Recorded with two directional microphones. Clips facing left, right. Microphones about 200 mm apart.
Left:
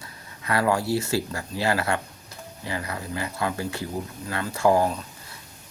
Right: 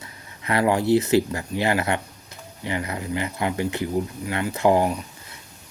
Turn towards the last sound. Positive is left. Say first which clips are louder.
# right 2 dB
turn(degrees=-20)  # may be behind; listen again after turning